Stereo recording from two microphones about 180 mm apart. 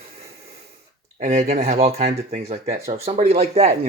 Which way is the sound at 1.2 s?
40° right (ahead or behind).